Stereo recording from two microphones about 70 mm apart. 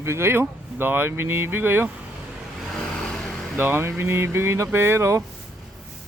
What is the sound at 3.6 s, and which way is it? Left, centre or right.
Speech, right.